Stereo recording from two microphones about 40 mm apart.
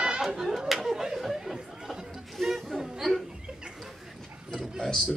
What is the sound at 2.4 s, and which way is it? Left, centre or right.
Music, centre.